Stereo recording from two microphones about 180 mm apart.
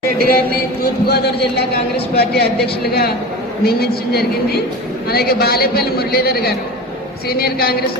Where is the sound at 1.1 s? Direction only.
65° left (ahead or behind).